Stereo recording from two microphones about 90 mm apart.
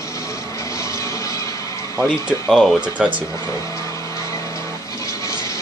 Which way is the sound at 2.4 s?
5° left (ahead or behind).